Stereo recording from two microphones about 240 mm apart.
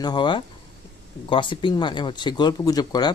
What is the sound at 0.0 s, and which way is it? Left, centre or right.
Speech, centre.